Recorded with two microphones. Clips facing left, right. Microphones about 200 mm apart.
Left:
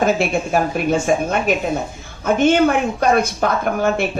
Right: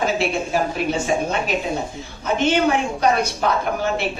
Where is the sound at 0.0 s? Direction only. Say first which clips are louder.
Left 4 dB; 50° left (ahead or behind).